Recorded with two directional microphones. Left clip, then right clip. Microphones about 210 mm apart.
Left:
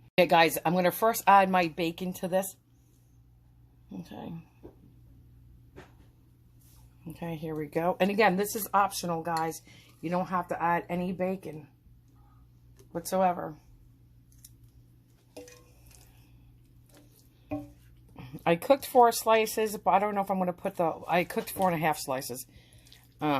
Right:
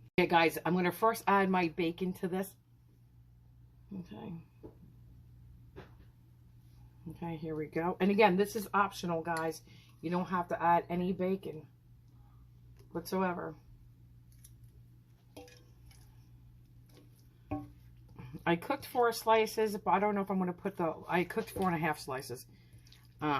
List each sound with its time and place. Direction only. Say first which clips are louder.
0.2 s speech: left 6 dB; 45° left (ahead or behind)
7.2 s speech: left 4 dB; 45° left (ahead or behind)
12.9 s speech: left 8 dB; 50° left (ahead or behind)
18.2 s speech: left 6 dB; 45° left (ahead or behind)